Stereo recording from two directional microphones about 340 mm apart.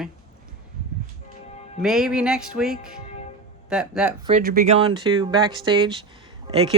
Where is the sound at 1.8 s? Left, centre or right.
Centre.